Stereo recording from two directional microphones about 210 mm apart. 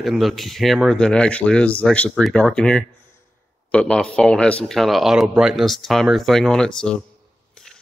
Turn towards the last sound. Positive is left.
turn(degrees=5)  # may be behind; listen again after turning